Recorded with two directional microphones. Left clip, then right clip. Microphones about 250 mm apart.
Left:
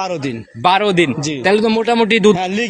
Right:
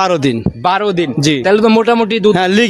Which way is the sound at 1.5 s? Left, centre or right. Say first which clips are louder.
Right 4 dB; right.